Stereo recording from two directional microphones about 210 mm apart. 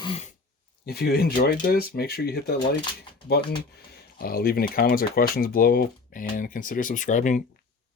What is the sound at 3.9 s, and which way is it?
Speech, 45° left (ahead or behind).